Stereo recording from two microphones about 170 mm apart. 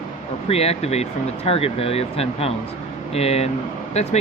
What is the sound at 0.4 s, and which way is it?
Speech, 35° left (ahead or behind).